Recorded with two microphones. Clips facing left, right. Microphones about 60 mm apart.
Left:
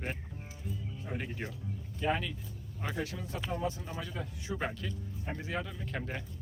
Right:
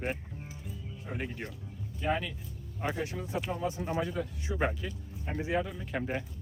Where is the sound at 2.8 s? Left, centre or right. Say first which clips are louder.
Right 3 dB; right.